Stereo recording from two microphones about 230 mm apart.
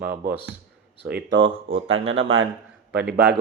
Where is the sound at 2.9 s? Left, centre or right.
Right.